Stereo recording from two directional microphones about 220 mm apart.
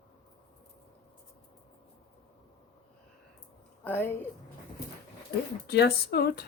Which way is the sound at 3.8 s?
10° left (ahead or behind).